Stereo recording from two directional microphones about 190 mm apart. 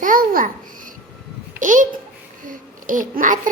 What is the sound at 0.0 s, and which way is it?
Babbling, 45° right (ahead or behind).